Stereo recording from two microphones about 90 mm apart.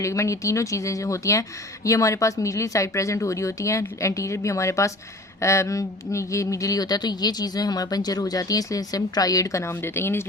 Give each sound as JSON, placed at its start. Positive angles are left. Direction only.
{"t": 0.0, "sound": "a woman's voice", "side_deg": 35}